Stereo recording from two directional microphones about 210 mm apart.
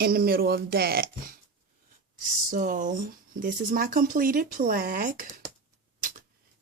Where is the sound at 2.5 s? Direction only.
40° right (ahead or behind).